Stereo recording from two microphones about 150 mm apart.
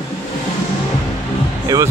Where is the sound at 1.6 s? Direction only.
20° right (ahead or behind).